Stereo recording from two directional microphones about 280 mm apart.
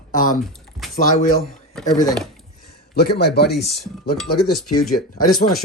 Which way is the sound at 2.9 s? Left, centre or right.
Left.